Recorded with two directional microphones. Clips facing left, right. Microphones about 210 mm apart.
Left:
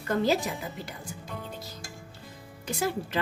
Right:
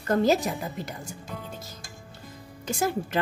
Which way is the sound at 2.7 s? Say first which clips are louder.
Right 3 dB; 45° right (ahead or behind).